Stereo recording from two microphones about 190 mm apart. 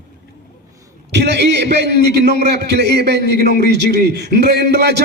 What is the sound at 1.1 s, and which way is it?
A man's voice, 60° right (ahead or behind).